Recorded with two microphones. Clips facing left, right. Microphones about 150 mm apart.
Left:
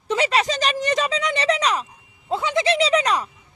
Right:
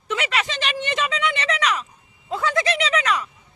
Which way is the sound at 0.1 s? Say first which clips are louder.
Left 5 dB; 35° left (ahead or behind).